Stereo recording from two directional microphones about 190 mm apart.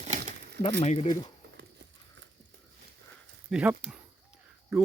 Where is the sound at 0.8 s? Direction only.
30° left (ahead or behind).